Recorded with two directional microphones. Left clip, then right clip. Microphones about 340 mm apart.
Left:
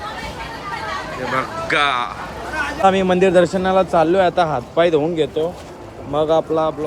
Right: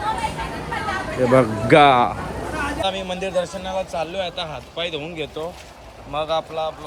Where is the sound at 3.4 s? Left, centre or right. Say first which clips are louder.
Left 9 dB; centre.